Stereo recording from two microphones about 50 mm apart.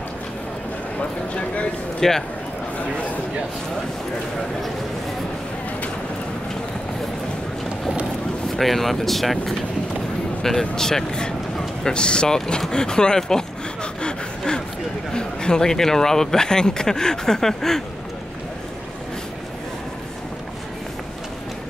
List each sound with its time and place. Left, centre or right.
1.3 s a sound: left
2.0 s speech: centre
8.5 s speech: centre
14.0 s gasp: centre
15.1 s speech: centre